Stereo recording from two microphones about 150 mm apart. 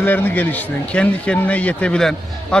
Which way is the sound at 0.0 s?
10° left (ahead or behind).